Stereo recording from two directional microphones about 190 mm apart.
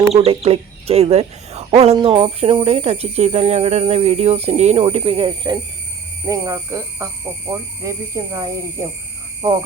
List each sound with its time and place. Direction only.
0.1 s speech: 30° right (ahead or behind)